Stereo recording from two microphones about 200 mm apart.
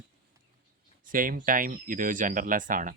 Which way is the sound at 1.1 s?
45° right (ahead or behind).